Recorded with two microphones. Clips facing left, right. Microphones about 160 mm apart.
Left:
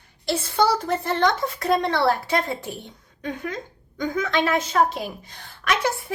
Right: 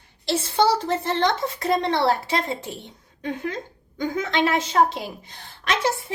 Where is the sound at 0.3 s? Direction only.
25° right (ahead or behind).